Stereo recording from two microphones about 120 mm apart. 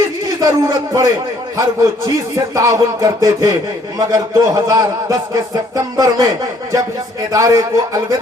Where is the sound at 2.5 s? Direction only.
30° right (ahead or behind).